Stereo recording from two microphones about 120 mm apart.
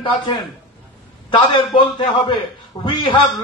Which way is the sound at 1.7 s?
40° left (ahead or behind).